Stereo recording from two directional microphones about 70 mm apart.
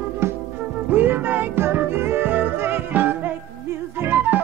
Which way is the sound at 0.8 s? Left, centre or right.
Right.